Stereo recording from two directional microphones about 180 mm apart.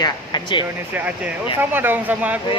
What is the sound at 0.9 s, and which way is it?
Speech, 10° right (ahead or behind).